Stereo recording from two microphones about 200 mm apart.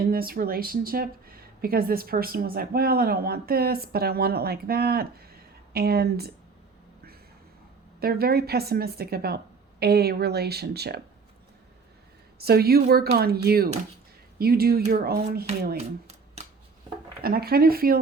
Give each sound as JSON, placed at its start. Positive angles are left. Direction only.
{"t": 0.1, "sound": "speech", "side_deg": -50}
{"t": 7.9, "sound": "speech", "side_deg": -50}
{"t": 12.4, "sound": "speech", "side_deg": -50}
{"t": 17.2, "sound": "speech", "side_deg": -50}